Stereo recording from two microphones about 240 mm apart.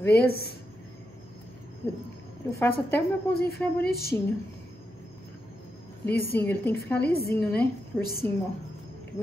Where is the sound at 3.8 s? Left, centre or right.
Left.